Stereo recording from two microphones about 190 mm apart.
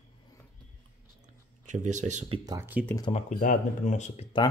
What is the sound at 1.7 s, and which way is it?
Speech, 40° right (ahead or behind).